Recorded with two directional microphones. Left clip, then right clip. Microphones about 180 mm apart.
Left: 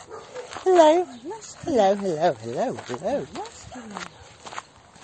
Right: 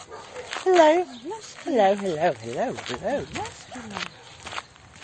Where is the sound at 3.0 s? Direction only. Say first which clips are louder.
Left 1 dB; centre (ahead or behind).